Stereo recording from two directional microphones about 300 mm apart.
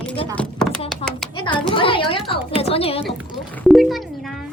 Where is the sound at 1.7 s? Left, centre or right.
Centre.